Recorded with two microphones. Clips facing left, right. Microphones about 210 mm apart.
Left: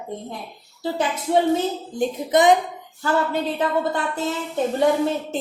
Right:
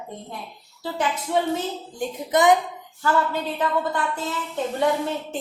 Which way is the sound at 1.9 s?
20° left (ahead or behind).